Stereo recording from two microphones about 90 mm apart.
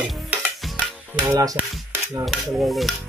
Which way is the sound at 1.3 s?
40° right (ahead or behind).